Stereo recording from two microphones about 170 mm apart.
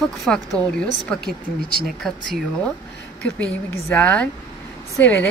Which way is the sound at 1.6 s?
60° right (ahead or behind).